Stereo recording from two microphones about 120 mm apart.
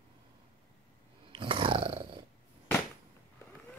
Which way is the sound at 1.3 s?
45° right (ahead or behind).